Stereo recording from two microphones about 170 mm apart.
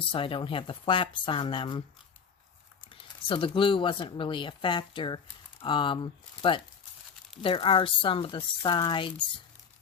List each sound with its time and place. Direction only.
0.1 s speech: 30° left (ahead or behind)
2.8 s speech: 30° left (ahead or behind)